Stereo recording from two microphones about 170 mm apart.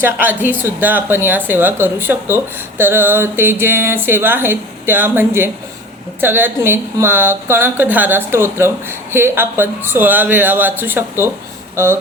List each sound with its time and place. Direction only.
0.0 s speech: 10° right (ahead or behind)